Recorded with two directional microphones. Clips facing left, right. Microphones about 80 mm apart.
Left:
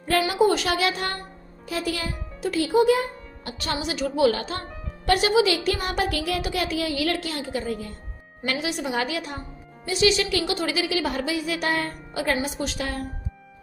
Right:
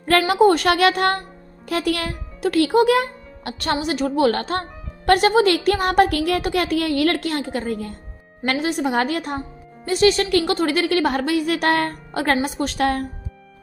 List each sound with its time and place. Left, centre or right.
0.0 s a woman's voice: right
0.3 s speech: right